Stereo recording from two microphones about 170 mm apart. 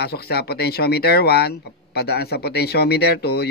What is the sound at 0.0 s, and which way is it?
Speech, 70° left (ahead or behind).